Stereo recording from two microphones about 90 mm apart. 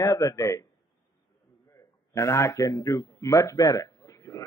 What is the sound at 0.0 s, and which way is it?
Speech, 40° left (ahead or behind).